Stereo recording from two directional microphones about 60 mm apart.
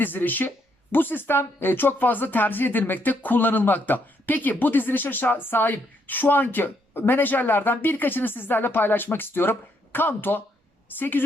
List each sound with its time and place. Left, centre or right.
0.0 s speech: left